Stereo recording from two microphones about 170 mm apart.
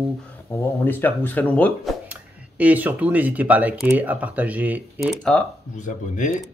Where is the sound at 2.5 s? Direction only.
10° right (ahead or behind).